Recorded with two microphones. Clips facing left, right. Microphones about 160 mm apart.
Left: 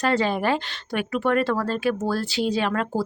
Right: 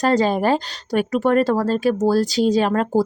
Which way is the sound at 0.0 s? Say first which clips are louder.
Right 5 dB; 40° right (ahead or behind).